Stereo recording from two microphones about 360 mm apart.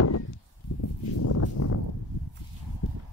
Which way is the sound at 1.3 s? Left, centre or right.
Left.